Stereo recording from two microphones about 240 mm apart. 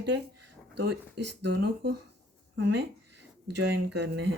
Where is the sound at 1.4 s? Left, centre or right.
Right.